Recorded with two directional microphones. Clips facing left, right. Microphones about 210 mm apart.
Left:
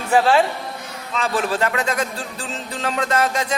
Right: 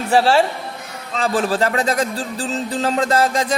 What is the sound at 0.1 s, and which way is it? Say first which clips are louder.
Speech: right 1 dB; 35° right (ahead or behind).